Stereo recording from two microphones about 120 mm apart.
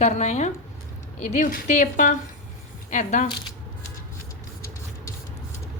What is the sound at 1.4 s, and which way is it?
A woman's voice, 90° left.